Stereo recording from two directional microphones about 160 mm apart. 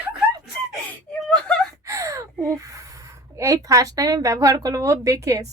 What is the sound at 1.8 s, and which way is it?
Speech, 20° right (ahead or behind).